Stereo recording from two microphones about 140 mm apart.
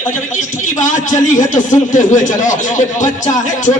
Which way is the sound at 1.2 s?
60° left (ahead or behind).